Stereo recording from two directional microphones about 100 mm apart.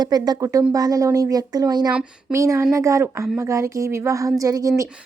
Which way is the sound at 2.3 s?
30° right (ahead or behind).